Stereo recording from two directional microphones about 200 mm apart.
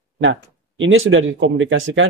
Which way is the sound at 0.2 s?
70° right (ahead or behind).